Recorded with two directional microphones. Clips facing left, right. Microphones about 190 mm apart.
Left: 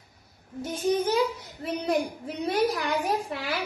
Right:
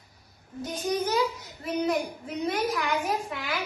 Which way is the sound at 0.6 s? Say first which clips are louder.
Left 3 dB; 30° left (ahead or behind).